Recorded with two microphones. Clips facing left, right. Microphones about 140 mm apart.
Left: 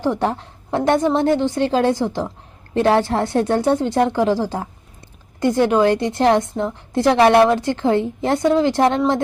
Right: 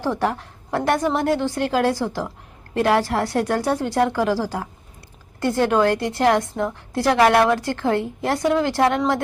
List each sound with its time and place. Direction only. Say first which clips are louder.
0.0 s a woman's voice: left 3 dB; 20° left (ahead or behind)